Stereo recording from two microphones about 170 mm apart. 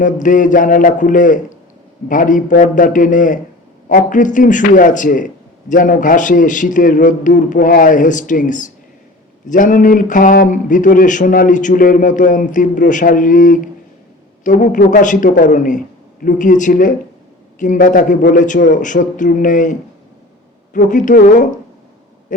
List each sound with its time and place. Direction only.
0.0 s a man's voice: 50° left (ahead or behind)
20.9 s a man's voice: 50° left (ahead or behind)
22.3 s a sound: 50° left (ahead or behind)